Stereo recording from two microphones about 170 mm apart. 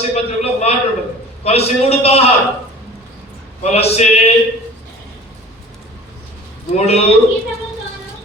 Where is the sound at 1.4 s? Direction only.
35° left (ahead or behind).